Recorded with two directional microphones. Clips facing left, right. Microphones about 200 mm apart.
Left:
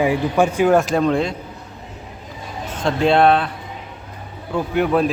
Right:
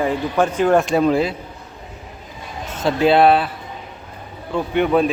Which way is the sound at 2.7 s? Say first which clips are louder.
Right 1 dB; 5° right (ahead or behind).